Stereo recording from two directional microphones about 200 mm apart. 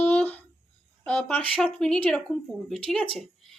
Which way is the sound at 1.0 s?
5° left (ahead or behind).